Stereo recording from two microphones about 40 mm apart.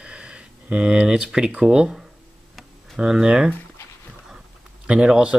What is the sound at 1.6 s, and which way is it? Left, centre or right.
Speech, right.